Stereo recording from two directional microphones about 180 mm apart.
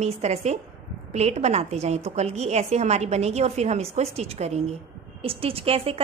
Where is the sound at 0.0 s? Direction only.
35° right (ahead or behind).